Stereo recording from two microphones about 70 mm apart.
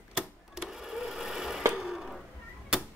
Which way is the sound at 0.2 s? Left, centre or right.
Centre.